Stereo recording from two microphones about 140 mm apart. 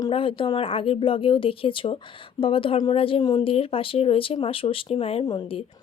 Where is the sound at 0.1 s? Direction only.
40° left (ahead or behind).